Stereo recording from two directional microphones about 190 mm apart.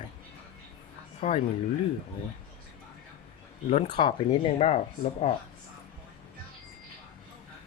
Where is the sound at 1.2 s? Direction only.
35° left (ahead or behind).